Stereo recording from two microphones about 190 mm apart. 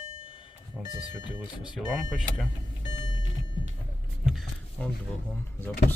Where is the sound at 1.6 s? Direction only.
5° right (ahead or behind).